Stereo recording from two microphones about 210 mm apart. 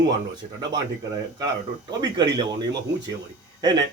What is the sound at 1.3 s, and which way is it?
Speech, 20° right (ahead or behind).